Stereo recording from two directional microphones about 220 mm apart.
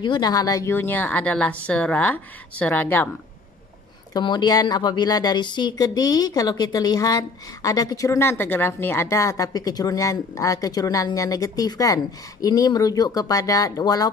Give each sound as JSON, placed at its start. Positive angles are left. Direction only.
{"t": 0.0, "sound": "a woman's voice", "side_deg": 20}
{"t": 4.1, "sound": "a woman's voice", "side_deg": 20}